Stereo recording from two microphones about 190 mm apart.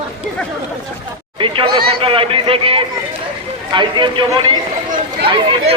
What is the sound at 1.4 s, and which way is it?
Speech, 25° right (ahead or behind).